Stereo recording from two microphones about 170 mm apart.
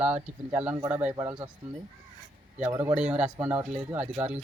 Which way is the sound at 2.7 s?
15° right (ahead or behind).